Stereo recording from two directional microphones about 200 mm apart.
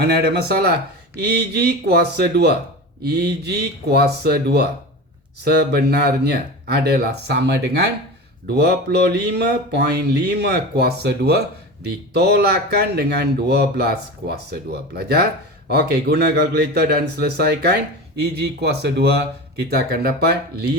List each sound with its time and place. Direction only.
0.2 s a man's voice: 50° right (ahead or behind)